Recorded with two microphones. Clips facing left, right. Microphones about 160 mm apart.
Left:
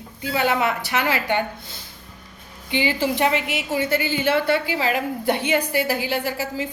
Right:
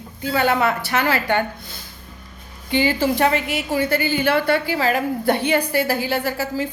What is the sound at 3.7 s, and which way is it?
A woman's voice, 20° left (ahead or behind).